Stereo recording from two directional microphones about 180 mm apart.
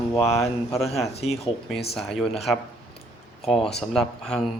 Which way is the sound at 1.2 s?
35° left (ahead or behind).